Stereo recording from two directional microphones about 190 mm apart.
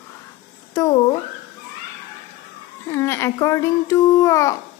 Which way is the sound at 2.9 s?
15° left (ahead or behind).